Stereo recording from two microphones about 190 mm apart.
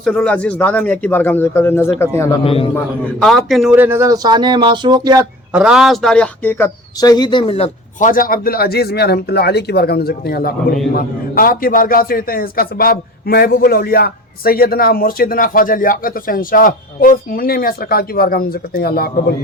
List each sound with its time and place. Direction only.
0.0 s a man's voice: 5° left (ahead or behind)
2.4 s a man's voice: 30° left (ahead or behind)
3.2 s speech: centre (ahead or behind); by 5.2 s 20° right (ahead or behind)
5.5 s a man's voice: 5° right (ahead or behind); by 19.1 s 55° left (ahead or behind)